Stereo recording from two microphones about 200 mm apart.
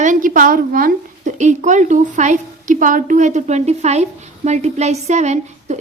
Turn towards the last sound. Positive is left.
turn(degrees=-35)  # may be behind; listen again after turning